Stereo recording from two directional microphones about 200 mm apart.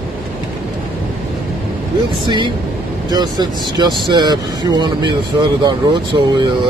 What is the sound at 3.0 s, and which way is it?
Speech, 20° right (ahead or behind).